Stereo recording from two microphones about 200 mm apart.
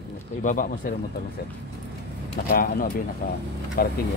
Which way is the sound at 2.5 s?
45° left (ahead or behind).